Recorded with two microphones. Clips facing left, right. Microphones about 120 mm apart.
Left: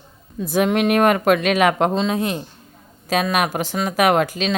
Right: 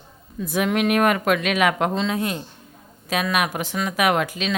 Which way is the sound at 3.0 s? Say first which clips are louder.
Left 3 dB; 35° left (ahead or behind).